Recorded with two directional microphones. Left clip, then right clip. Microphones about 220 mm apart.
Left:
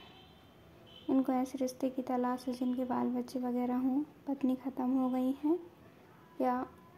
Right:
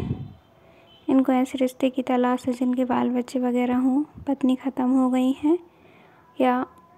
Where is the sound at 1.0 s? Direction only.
30° right (ahead or behind).